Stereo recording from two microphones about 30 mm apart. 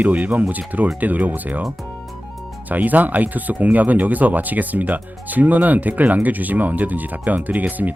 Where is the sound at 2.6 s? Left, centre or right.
Right.